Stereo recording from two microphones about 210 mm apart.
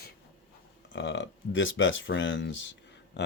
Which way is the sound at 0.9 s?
60° left (ahead or behind).